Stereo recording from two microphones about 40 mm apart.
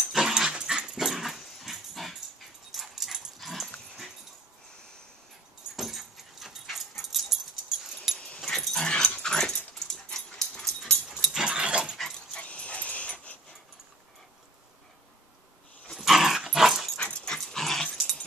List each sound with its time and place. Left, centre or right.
0.0 s dog: centre
5.8 s dog: centre
8.5 s dog: centre
11.3 s dog: right
12.4 s dog: left
16.0 s dog: centre
16.9 s dog: left
17.6 s dog: centre